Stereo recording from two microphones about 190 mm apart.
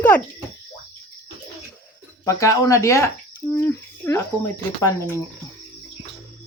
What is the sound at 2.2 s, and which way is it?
Speech, 15° left (ahead or behind).